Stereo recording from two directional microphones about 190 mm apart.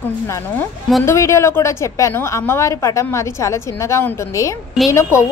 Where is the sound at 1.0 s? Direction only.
15° left (ahead or behind).